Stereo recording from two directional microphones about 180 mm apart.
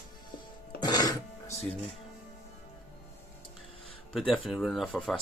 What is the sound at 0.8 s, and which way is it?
Music, 20° left (ahead or behind).